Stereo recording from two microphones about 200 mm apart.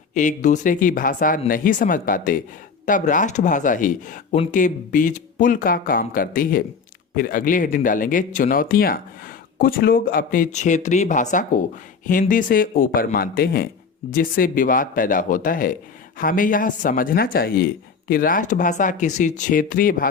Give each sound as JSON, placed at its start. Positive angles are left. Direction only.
{"t": 0.1, "sound": "speech", "side_deg": 40}